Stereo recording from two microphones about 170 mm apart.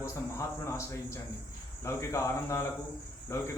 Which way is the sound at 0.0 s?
15° left (ahead or behind).